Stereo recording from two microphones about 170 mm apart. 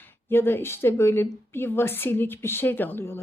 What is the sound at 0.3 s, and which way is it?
A woman's voice, 15° left (ahead or behind).